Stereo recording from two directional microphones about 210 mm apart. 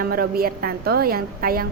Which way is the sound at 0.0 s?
45° right (ahead or behind).